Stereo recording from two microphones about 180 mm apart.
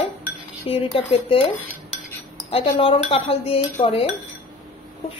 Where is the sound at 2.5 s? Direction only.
30° left (ahead or behind).